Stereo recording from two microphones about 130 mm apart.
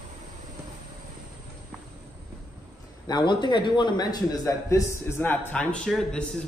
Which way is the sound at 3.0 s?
35° left (ahead or behind).